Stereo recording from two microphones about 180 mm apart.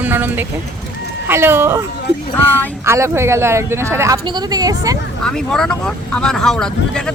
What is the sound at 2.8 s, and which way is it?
Speech, 15° right (ahead or behind).